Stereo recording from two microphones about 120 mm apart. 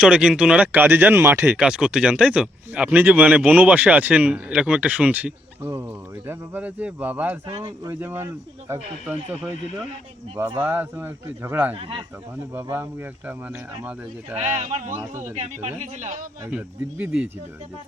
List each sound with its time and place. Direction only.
0.0 s speech: 10° right (ahead or behind)
7.4 s speech: 40° right (ahead or behind)
7.9 s speech: 20° right (ahead or behind)
10.6 s speech: 15° right (ahead or behind)
11.7 s speech: 50° right (ahead or behind)
12.7 s speech: 20° right (ahead or behind)
14.3 s speech: 90° right
15.2 s speech: 75° right (ahead or behind)
16.5 s speech: 10° right (ahead or behind)